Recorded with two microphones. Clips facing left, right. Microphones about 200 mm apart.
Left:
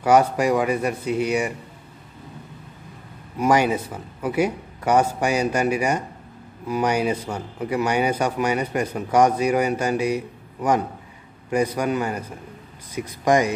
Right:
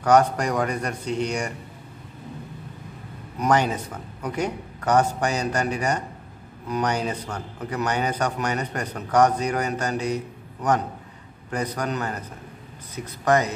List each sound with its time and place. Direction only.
0.0 s a man's voice: 10° left (ahead or behind)
3.3 s a man's voice: 10° left (ahead or behind)